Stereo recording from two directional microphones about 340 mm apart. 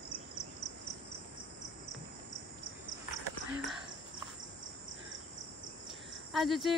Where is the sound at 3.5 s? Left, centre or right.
Centre.